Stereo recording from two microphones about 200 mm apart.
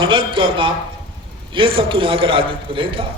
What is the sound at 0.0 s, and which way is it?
A man's voice, 25° right (ahead or behind).